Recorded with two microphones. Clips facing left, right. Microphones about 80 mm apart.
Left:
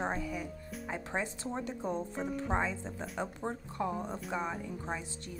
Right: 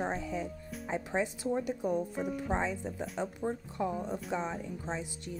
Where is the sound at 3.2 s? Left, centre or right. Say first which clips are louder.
Right 3 dB; left.